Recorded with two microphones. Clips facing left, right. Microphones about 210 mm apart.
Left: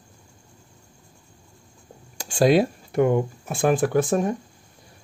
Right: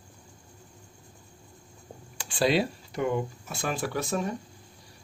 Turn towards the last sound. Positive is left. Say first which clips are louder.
# left 8 dB
turn(degrees=50)  # may be behind; listen again after turning